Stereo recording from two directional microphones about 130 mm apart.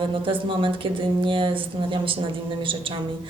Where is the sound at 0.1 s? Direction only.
40° right (ahead or behind).